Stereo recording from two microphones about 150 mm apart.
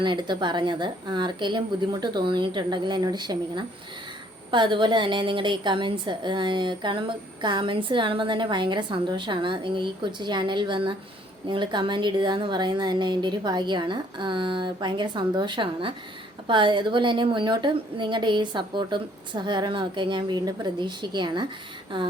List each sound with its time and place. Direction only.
0.0 s a woman's voice: 30° right (ahead or behind)